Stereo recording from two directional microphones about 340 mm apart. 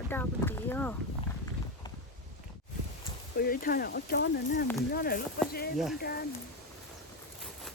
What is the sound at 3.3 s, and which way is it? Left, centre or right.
Speech, left.